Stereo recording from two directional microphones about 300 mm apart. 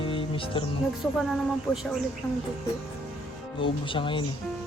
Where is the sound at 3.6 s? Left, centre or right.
Centre.